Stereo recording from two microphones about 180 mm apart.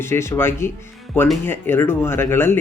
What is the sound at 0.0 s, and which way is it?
Speech, 15° left (ahead or behind).